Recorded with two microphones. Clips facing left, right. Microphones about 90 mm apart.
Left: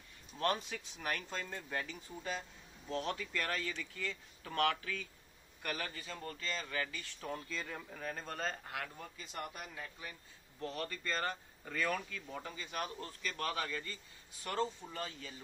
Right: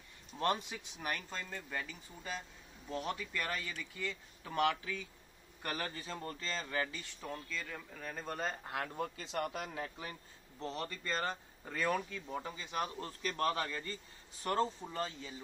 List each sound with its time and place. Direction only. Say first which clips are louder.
0.4 s speech: right 1 dB; 15° right (ahead or behind)
1.3 s speech: left 1 dB; centre (ahead or behind)
2.9 s speech: left 1 dB; 10° right (ahead or behind)
5.6 s speech: right 1 dB; 25° right (ahead or behind)
7.2 s speech: left 1 dB; 5° left (ahead or behind)
8.6 s speech: right 3 dB; 30° right (ahead or behind)
8.9 s speech: right 8 dB; 70° right (ahead or behind); by 9.7 s 90° right
9.7 s a man's voice: right 5 dB; 60° right (ahead or behind)
10.6 s speech: even; 25° right (ahead or behind)
13.2 s speech: right 4 dB; 35° right (ahead or behind)
14.4 s speech: right 3 dB; 35° right (ahead or behind)